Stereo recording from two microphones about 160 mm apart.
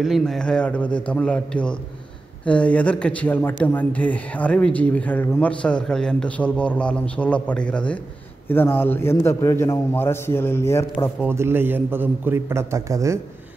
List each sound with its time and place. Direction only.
0.0 s speech: centre (ahead or behind); by 11.1 s 15° left (ahead or behind)
11.1 s a man's voice: 15° right (ahead or behind)